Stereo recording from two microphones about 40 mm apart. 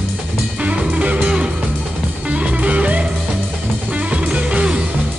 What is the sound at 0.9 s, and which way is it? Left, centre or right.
Music, right.